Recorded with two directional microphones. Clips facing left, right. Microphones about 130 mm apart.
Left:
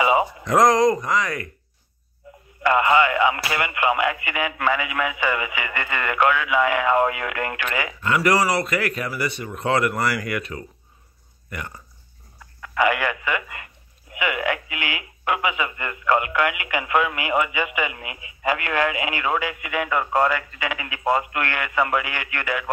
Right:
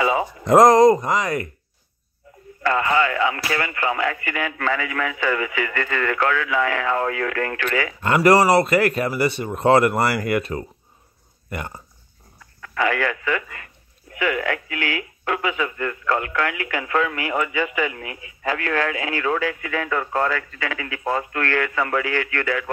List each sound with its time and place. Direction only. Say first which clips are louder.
0.0 s a sound: left 2 dB; 15° left (ahead or behind)
0.5 s speech: right 5 dB; 30° right (ahead or behind)
2.6 s speech: left 2 dB; 15° left (ahead or behind)
8.0 s speech: right 5 dB; 35° right (ahead or behind)
12.7 s speech: left 1 dB; 15° left (ahead or behind)